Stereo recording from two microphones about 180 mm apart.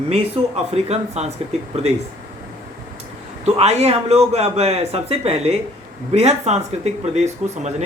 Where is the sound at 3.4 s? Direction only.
35° right (ahead or behind).